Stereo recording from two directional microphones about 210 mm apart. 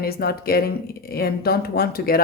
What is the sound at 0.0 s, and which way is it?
A woman's voice, 45° left (ahead or behind).